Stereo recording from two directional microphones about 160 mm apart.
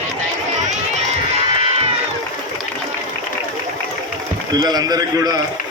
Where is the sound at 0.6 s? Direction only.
45° right (ahead or behind).